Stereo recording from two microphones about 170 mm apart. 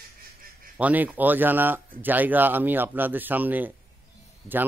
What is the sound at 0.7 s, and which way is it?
Speech, 10° right (ahead or behind).